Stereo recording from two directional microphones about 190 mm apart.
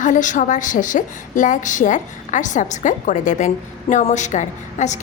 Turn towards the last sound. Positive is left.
turn(degrees=40)  # may be behind; listen again after turning